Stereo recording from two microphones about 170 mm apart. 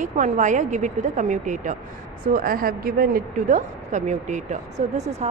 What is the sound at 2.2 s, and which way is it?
A woman's voice, 60° right (ahead or behind).